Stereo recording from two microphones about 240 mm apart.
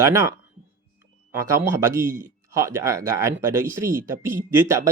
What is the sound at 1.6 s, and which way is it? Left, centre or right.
Speech, centre.